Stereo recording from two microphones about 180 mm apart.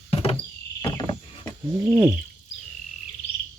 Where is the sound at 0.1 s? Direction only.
30° left (ahead or behind).